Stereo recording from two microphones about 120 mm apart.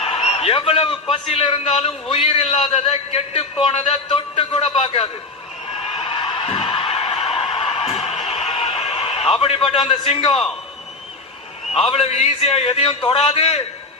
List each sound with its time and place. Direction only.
0.0 s a sound: 55° left (ahead or behind)
1.1 s a man's voice: 50° left (ahead or behind)
2.5 s a man's voice: 45° left (ahead or behind)
2.7 s a man's voice: 60° left (ahead or behind)
5.7 s a sound: 50° left (ahead or behind)
11.7 s speech: 55° left (ahead or behind)